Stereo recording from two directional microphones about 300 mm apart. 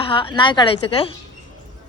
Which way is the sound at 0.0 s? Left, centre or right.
Centre.